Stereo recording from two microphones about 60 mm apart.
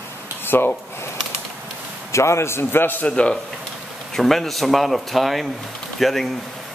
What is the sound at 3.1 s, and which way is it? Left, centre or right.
Speech, centre.